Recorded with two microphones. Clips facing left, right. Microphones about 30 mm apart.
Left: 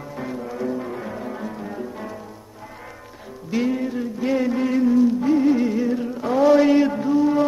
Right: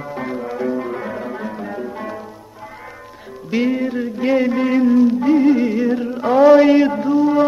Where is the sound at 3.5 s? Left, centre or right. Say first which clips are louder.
Right 4 dB; right.